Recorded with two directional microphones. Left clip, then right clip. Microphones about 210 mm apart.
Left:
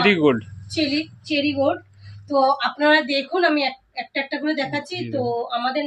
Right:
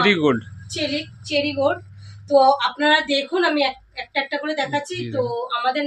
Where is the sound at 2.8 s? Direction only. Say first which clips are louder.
Even; 20° right (ahead or behind).